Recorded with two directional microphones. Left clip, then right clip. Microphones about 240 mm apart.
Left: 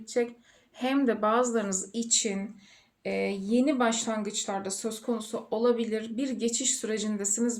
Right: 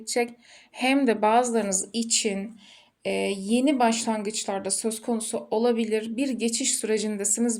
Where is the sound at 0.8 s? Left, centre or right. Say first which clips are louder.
Right 5 dB; right.